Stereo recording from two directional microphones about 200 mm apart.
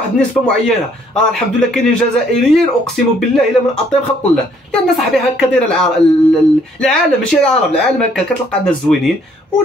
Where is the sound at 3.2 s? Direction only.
5° left (ahead or behind).